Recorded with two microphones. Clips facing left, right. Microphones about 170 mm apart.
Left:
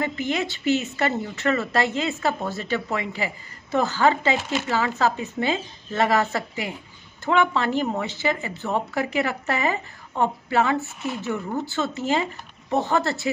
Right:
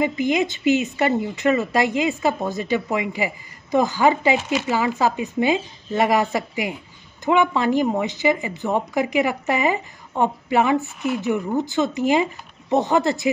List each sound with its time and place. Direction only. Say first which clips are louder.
0.0 s speech: right 5 dB; 15° right (ahead or behind)